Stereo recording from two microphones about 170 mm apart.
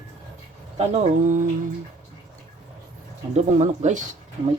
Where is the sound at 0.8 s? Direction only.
45° right (ahead or behind).